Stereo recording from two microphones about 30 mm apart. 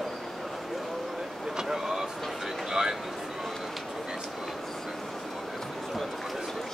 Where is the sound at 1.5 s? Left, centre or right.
Centre.